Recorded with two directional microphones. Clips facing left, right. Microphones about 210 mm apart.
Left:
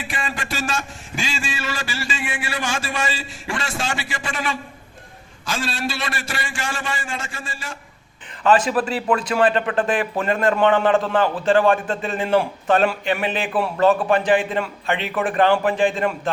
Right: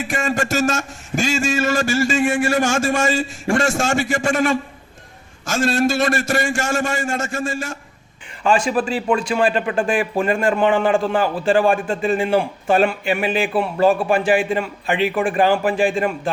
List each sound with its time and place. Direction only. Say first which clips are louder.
0.0 s a man's voice: right 8 dB; 45° right (ahead or behind)
8.7 s a man's voice: right 2 dB; 5° right (ahead or behind)